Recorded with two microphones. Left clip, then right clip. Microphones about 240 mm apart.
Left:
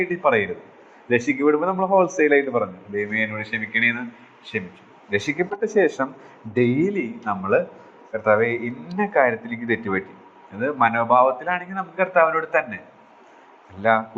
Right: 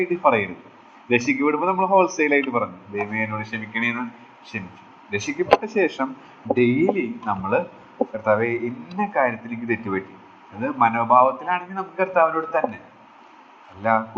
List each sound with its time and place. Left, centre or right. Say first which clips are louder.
0.0 s a man's voice: right 1 dB; left
9.0 s a man's voice: left 3 dB; left
13.8 s a man's voice: left 1 dB; left